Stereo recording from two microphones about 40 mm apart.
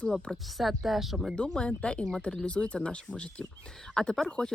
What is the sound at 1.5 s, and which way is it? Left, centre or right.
Speech, left.